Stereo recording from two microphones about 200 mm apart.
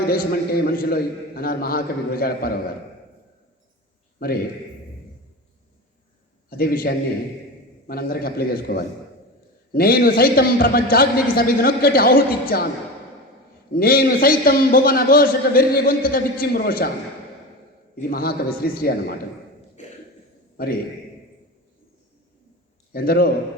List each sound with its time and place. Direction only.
0.1 s a man's voice: 50° left (ahead or behind)
6.5 s a man's voice: 50° left (ahead or behind)
13.7 s a man's voice: 45° left (ahead or behind)
17.9 s a man's voice: 50° left (ahead or behind)
22.9 s a man's voice: 50° left (ahead or behind)